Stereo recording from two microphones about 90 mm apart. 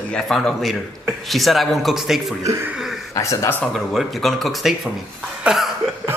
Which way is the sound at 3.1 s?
35° left (ahead or behind).